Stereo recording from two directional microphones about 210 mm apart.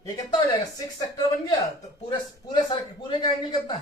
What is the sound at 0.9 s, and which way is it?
Speech, 20° left (ahead or behind).